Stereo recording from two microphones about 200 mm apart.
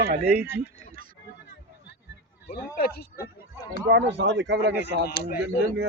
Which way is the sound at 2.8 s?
50° left (ahead or behind).